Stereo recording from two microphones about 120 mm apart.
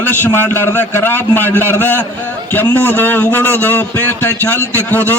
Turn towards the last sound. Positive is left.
turn(degrees=15)  # may be behind; listen again after turning